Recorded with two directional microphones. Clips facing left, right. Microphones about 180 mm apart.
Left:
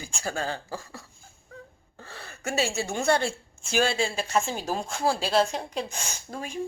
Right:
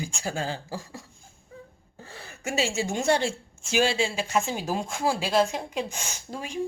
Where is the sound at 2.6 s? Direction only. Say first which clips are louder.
Right 2 dB; 15° right (ahead or behind).